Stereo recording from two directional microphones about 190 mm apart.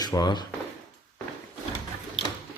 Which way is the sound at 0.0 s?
20° left (ahead or behind).